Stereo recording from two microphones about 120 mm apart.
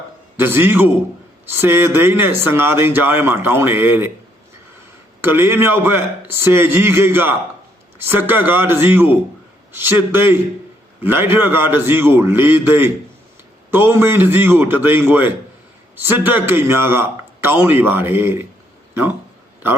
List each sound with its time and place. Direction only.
0.3 s a man's voice: 20° right (ahead or behind)
5.2 s a man's voice: 20° right (ahead or behind)